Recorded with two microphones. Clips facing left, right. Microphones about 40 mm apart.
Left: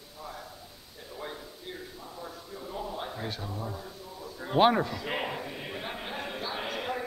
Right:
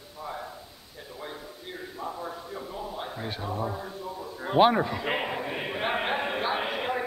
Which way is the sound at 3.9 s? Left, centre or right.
Right.